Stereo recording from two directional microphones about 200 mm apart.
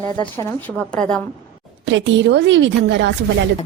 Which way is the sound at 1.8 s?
65° right (ahead or behind).